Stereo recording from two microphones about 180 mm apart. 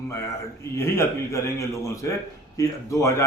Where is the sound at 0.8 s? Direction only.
15° left (ahead or behind).